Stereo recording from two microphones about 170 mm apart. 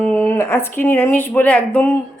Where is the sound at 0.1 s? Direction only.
10° left (ahead or behind).